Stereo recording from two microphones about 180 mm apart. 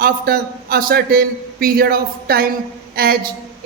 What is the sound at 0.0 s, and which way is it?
A woman's voice, 55° right (ahead or behind).